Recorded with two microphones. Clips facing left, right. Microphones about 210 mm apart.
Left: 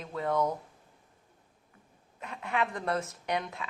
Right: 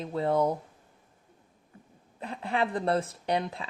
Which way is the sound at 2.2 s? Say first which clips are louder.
Right 3 dB; 30° right (ahead or behind).